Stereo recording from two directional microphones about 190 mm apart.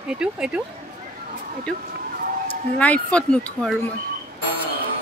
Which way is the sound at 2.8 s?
5° left (ahead or behind).